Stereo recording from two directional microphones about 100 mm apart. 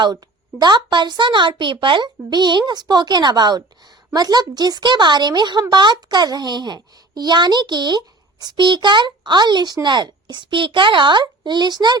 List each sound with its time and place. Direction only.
0.6 s speech: 50° right (ahead or behind)